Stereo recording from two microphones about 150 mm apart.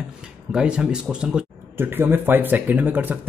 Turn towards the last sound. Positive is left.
turn(degrees=-10)  # may be behind; listen again after turning